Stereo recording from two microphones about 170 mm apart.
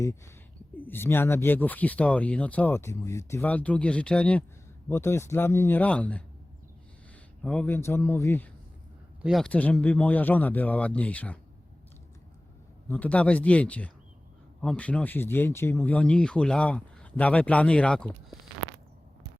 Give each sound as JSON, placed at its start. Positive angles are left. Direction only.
{"t": 0.0, "sound": "speech", "side_deg": 20}
{"t": 7.4, "sound": "speech", "side_deg": 5}
{"t": 9.2, "sound": "speech", "side_deg": 0}
{"t": 12.9, "sound": "speech", "side_deg": 10}